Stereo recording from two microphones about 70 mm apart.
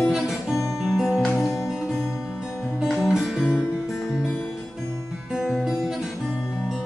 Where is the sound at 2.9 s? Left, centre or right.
Centre.